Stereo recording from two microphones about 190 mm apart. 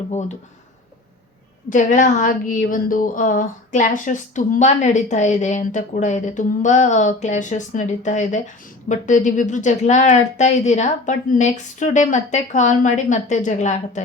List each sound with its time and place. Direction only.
0.1 s a woman's voice: 40° left (ahead or behind)
1.7 s a woman's voice: 40° left (ahead or behind)